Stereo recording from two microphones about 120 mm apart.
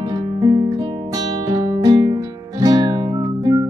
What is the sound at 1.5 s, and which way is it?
Music, 35° right (ahead or behind).